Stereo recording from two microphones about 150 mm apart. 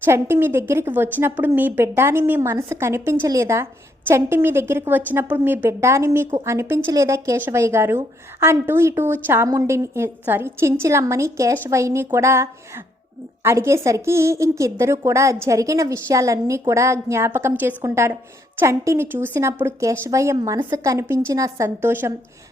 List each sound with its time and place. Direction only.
0.0 s a woman's voice: 15° right (ahead or behind)